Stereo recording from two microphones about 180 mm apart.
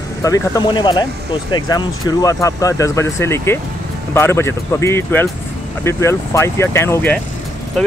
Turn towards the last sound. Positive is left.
turn(degrees=10)  # may be behind; listen again after turning